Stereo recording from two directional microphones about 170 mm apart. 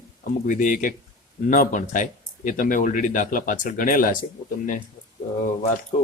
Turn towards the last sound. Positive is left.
turn(degrees=45)  # may be behind; listen again after turning